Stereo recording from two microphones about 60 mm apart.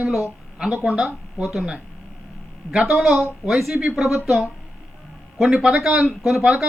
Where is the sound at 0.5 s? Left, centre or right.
Centre.